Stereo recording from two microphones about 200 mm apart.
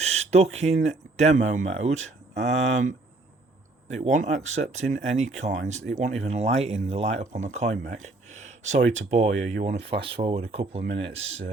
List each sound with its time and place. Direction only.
0.0 s speech: 35° right (ahead or behind)